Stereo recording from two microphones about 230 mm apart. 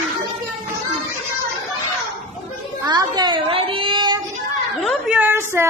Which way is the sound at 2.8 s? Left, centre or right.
Centre.